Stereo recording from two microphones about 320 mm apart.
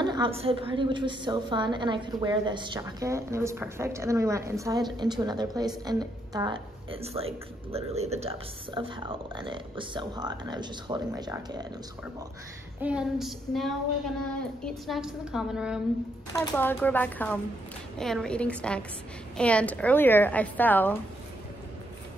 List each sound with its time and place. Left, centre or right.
0.0 s a woman's voice: centre
12.8 s a woman's voice: centre